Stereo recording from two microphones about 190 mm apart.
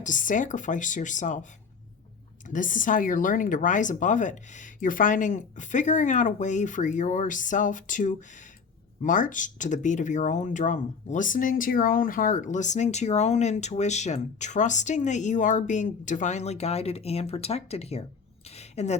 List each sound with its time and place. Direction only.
0.0 s speech: 45° left (ahead or behind)
2.5 s speech: 45° left (ahead or behind)
18.4 s a sound: 35° left (ahead or behind)